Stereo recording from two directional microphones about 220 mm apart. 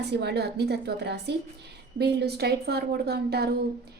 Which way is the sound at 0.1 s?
50° right (ahead or behind).